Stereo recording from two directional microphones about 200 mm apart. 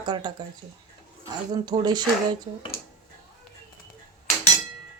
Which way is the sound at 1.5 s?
20° right (ahead or behind).